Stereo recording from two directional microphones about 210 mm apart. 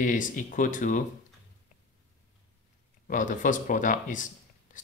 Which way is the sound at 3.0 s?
40° left (ahead or behind).